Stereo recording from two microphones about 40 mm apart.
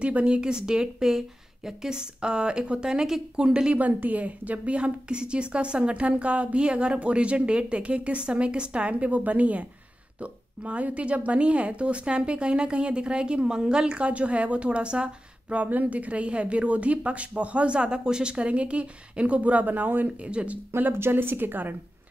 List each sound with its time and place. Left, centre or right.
0.0 s a woman's voice: right
3.7 s a woman's voice: right
13.8 s a woman's voice: right
15.5 s a woman's voice: right
18.3 s a woman's voice: right
20.2 s a woman's voice: right
20.9 s a woman's voice: right